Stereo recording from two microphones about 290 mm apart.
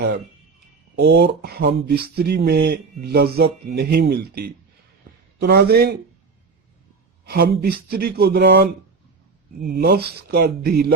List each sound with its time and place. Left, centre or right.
0.9 s speech: right
7.3 s speech: right
9.7 s speech: right